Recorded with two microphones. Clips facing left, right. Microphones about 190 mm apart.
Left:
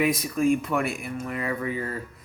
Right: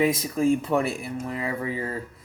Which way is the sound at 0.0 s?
25° right (ahead or behind).